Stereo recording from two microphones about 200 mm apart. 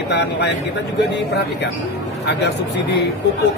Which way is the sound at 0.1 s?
55° left (ahead or behind).